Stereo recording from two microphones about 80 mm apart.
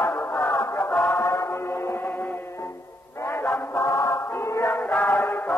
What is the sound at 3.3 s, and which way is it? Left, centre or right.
Music, left.